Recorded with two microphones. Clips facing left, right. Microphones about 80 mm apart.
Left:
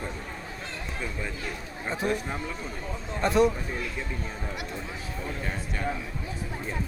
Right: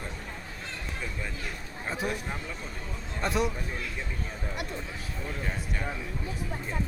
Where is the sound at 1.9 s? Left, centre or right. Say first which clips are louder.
Left 3 dB; centre.